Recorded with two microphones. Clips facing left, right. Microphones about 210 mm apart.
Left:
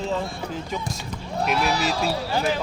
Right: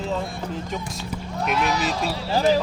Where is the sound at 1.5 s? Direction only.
35° left (ahead or behind).